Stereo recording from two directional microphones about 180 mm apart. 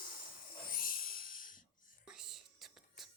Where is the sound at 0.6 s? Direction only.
50° left (ahead or behind).